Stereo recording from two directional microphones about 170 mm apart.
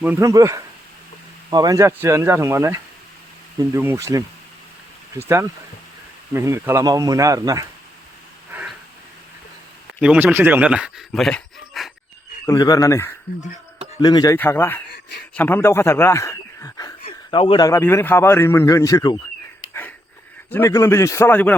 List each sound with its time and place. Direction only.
0.0 s speech: 15° right (ahead or behind)
10.0 s speech: 5° right (ahead or behind)
12.5 s speech: 20° left (ahead or behind)
14.3 s a man's voice: 10° left (ahead or behind)
17.1 s a sound: 30° left (ahead or behind)
17.7 s a man's voice: 15° left (ahead or behind)
20.5 s a man's voice: 15° left (ahead or behind)